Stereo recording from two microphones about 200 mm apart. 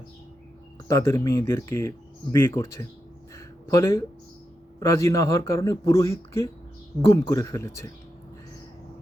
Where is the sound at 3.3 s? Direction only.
15° left (ahead or behind).